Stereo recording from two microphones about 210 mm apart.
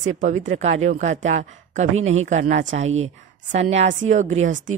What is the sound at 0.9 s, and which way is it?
Speech, 35° right (ahead or behind).